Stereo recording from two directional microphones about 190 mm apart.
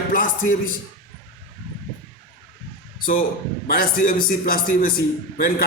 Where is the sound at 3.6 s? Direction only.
50° left (ahead or behind).